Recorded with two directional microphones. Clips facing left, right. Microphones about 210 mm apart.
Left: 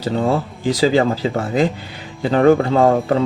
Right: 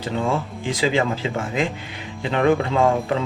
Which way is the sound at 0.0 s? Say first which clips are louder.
Left 5 dB; 35° left (ahead or behind).